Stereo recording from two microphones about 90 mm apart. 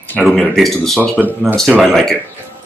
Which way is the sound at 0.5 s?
5° left (ahead or behind).